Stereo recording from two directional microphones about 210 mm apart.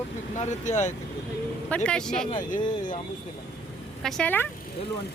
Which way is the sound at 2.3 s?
40° left (ahead or behind).